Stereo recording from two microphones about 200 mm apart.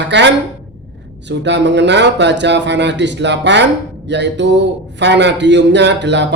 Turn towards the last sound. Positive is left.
turn(degrees=-60)  # may be behind; listen again after turning